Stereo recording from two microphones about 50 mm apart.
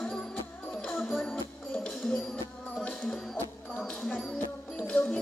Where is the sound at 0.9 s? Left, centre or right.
Centre.